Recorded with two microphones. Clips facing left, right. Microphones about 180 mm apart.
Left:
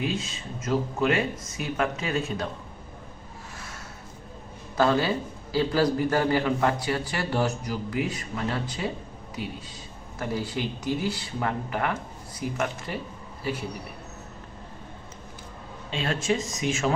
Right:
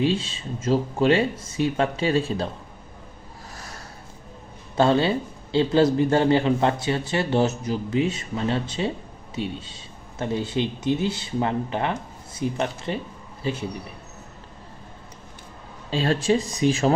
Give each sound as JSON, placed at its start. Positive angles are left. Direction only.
{"t": 0.0, "sound": "a man's voice", "side_deg": -30}
{"t": 4.8, "sound": "a man's voice", "side_deg": -25}
{"t": 15.9, "sound": "speech", "side_deg": -35}